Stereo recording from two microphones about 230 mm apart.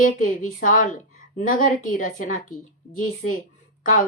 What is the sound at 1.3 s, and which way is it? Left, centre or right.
Speech, left.